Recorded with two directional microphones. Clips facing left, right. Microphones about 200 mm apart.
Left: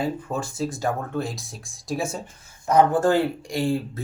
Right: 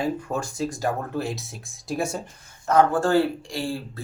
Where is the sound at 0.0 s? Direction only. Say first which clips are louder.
Even; centre (ahead or behind).